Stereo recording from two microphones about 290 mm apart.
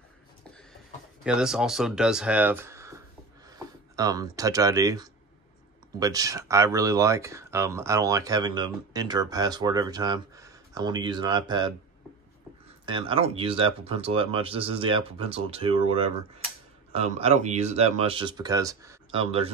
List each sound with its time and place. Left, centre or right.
1.2 s speech: centre
12.8 s speech: centre